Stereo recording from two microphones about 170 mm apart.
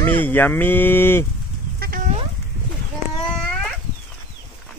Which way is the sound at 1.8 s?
55° right (ahead or behind).